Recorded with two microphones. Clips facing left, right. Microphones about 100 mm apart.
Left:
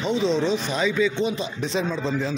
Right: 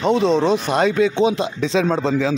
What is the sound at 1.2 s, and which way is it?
Speech, 90° right.